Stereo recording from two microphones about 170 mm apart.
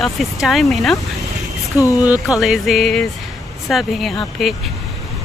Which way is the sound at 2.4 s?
Centre (ahead or behind).